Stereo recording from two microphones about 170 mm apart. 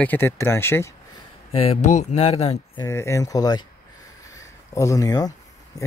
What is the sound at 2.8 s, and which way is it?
Speech, 15° left (ahead or behind).